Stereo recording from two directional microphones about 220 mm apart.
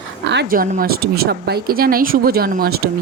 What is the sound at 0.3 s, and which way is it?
Speech, 45° right (ahead or behind).